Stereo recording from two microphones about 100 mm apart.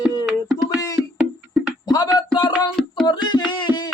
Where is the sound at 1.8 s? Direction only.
45° left (ahead or behind).